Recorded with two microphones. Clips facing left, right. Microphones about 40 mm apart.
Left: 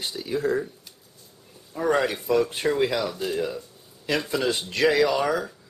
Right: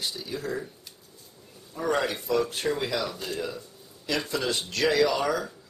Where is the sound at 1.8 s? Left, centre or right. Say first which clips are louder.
Left 4 dB; centre.